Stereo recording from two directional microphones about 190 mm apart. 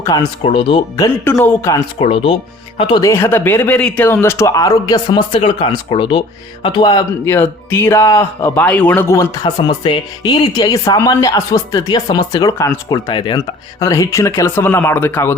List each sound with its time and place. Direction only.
0.0 s speech: 20° left (ahead or behind)
2.0 s speech: 30° left (ahead or behind); by 15.4 s 10° left (ahead or behind)